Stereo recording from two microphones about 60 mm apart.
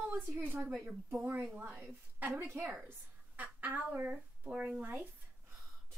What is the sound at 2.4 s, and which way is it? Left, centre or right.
Speech, right.